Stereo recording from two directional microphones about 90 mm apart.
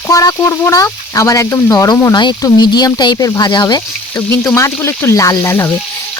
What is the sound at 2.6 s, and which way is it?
Speech, 50° left (ahead or behind).